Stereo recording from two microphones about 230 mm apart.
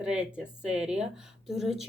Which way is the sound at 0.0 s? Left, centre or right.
Centre.